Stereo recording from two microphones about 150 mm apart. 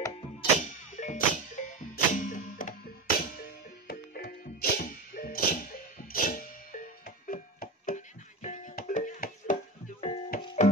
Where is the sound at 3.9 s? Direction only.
85° left.